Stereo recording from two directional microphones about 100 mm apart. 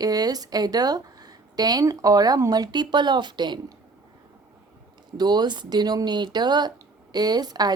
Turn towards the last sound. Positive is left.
turn(degrees=-40)  # may be behind; listen again after turning